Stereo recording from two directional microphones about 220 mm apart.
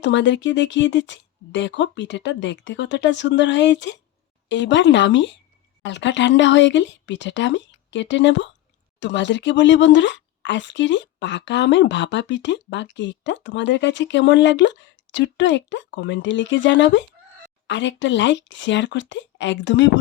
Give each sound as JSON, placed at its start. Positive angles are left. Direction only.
{"t": 0.0, "sound": "speech", "side_deg": 55}